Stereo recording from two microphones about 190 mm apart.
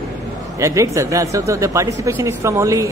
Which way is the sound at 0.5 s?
15° right (ahead or behind).